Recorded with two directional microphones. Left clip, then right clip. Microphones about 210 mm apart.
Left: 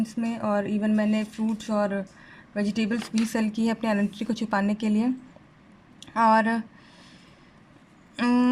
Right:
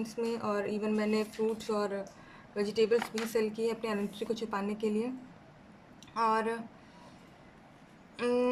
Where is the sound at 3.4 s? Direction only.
45° left (ahead or behind).